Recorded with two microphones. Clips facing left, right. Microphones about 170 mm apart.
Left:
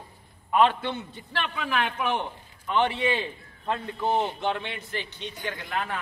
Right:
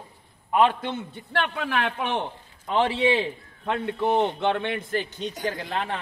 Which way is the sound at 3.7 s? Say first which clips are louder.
Right 3 dB; 75° right (ahead or behind).